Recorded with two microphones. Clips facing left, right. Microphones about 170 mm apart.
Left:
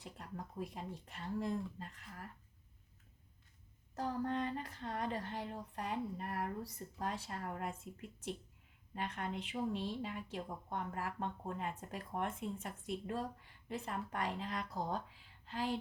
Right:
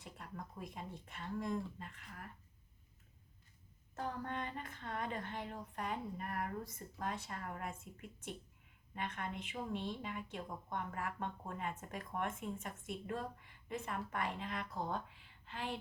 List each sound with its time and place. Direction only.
0.0 s a woman's voice: 35° left (ahead or behind)
3.9 s a woman's voice: 35° left (ahead or behind)
9.0 s a woman's voice: 35° left (ahead or behind)